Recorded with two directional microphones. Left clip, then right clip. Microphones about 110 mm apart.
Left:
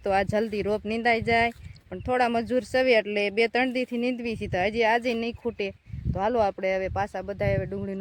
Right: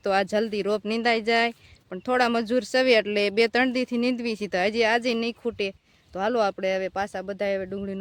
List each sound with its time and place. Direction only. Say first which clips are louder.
0.0 s speech: right 1 dB; 25° right (ahead or behind)
0.9 s speech: even; 30° right (ahead or behind); by 7.8 s 5° right (ahead or behind)